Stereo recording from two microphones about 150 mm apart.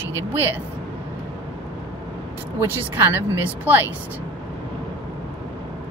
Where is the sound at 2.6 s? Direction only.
15° right (ahead or behind).